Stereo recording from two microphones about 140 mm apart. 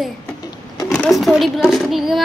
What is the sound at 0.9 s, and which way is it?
Speech, centre (ahead or behind).